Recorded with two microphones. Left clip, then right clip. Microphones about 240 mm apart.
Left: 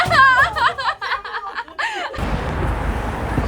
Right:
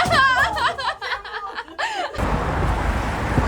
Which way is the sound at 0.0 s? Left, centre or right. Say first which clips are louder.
Left 4 dB; centre.